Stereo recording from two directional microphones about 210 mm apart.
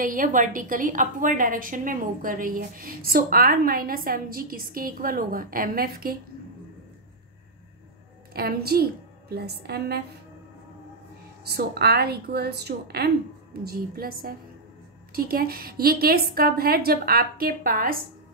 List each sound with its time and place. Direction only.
0.0 s a woman's voice: 40° right (ahead or behind)
8.3 s a woman's voice: 45° right (ahead or behind)
11.4 s a woman's voice: 50° right (ahead or behind)